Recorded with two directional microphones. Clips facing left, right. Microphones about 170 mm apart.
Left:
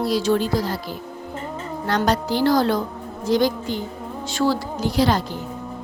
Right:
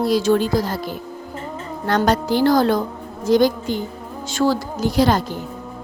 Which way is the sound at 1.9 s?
50° right (ahead or behind).